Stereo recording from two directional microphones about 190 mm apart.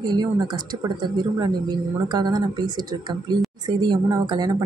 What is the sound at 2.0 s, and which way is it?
Speech, 20° right (ahead or behind).